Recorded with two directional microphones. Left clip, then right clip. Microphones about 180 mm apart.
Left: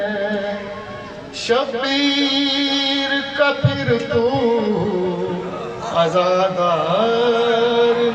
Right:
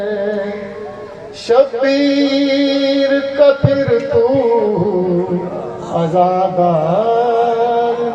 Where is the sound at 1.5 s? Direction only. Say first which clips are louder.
Right 7 dB; 30° right (ahead or behind).